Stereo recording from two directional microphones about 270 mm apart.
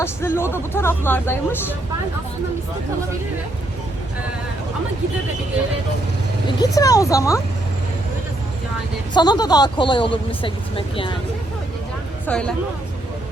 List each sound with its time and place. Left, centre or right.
0.0 s speech: centre
6.6 s speech: centre
9.1 s speech: centre
12.2 s speech: centre